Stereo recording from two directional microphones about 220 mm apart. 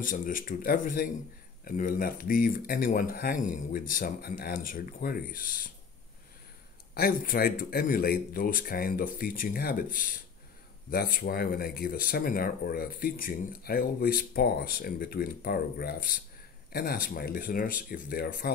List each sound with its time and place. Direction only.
0.0 s speech: 40° left (ahead or behind)
6.9 s speech: 40° left (ahead or behind)